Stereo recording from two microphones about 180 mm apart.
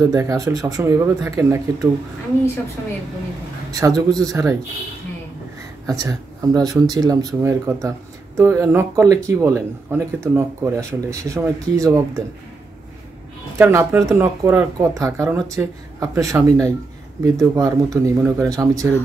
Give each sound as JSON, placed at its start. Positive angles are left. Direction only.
{"t": 0.0, "sound": "speech", "side_deg": -20}
{"t": 3.7, "sound": "speech", "side_deg": -20}
{"t": 5.9, "sound": "speech", "side_deg": -20}
{"t": 13.6, "sound": "speech", "side_deg": -15}